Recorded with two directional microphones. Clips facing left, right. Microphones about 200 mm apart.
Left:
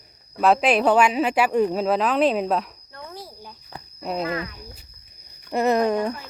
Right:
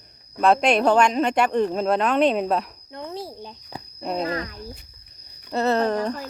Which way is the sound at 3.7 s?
10° right (ahead or behind).